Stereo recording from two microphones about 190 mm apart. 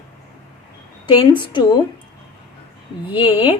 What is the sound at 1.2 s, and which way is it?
Speech, 25° left (ahead or behind).